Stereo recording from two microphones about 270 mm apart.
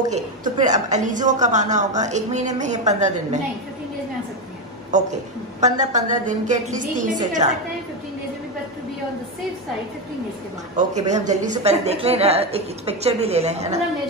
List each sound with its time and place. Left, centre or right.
0.1 s a woman's voice: right
4.9 s a woman's voice: right
11.1 s a woman's voice: right